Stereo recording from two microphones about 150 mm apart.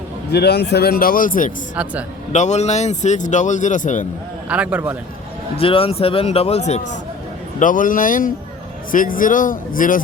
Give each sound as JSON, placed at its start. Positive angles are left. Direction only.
{"t": 0.3, "sound": "a man's voice", "side_deg": 90}
{"t": 1.7, "sound": "a man's voice", "side_deg": -10}
{"t": 2.3, "sound": "speech", "side_deg": 50}
{"t": 4.4, "sound": "a man's voice", "side_deg": -10}
{"t": 5.5, "sound": "a man's voice", "side_deg": 40}
{"t": 7.6, "sound": "speech", "side_deg": 60}